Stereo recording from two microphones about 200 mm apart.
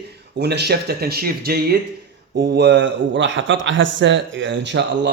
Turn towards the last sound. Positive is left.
turn(degrees=-60)  # may be behind; listen again after turning